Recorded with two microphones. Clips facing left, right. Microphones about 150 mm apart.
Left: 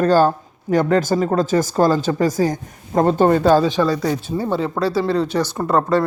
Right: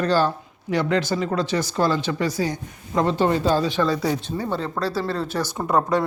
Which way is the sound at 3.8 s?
Centre (ahead or behind).